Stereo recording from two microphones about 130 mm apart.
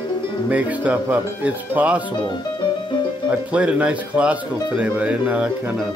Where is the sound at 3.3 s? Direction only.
10° right (ahead or behind).